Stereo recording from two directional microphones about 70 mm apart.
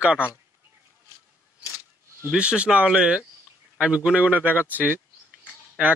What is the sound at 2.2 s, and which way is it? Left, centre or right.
Speech, centre.